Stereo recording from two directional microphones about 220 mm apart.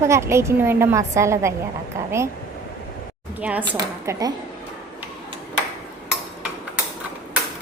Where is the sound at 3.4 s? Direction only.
5° right (ahead or behind).